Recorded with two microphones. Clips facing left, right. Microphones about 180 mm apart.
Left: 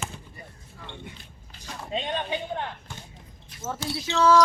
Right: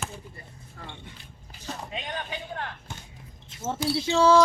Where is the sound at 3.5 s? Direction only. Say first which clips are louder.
Right 2 dB; 25° right (ahead or behind).